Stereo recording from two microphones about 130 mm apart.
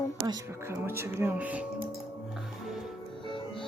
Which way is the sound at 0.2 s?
25° right (ahead or behind).